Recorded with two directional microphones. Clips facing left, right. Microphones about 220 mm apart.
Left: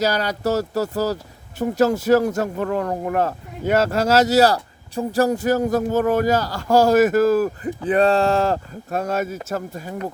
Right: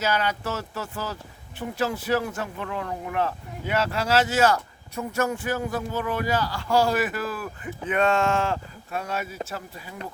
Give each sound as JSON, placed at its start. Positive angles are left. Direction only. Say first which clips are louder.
{"t": 0.0, "sound": "speech", "louder": "left 5 dB", "side_deg": 40}